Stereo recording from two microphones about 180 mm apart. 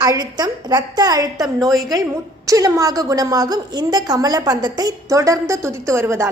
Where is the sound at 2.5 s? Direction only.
20° right (ahead or behind).